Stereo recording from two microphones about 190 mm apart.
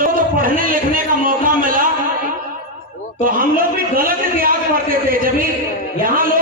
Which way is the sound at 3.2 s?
50° right (ahead or behind).